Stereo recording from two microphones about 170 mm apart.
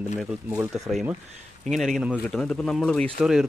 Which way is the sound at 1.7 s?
Centre (ahead or behind).